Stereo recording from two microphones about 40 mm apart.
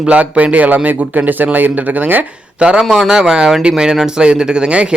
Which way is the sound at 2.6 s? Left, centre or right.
Right.